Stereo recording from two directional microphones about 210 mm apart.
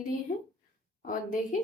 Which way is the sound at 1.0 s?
40° left (ahead or behind).